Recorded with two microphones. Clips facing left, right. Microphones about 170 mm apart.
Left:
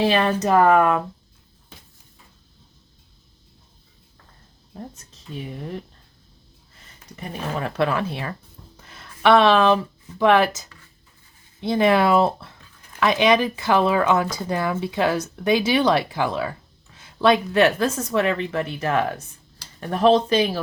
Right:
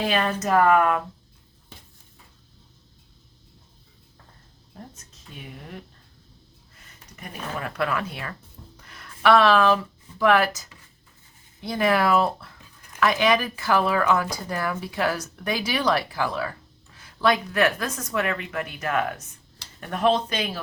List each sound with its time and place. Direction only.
0.0 s speech: 25° left (ahead or behind)
5.3 s speech: 30° left (ahead or behind)
7.2 s speech: 30° left (ahead or behind)
8.8 s a sound: 25° left (ahead or behind)
11.6 s speech: 25° left (ahead or behind)